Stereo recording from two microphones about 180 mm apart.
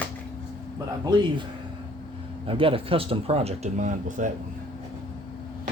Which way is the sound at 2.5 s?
30° right (ahead or behind).